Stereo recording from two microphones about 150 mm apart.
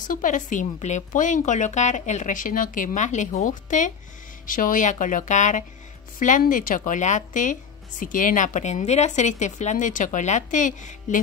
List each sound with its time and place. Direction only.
0.1 s speech: 60° left (ahead or behind)